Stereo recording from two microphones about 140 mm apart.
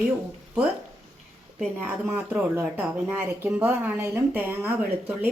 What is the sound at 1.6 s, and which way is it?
Speech, 10° right (ahead or behind).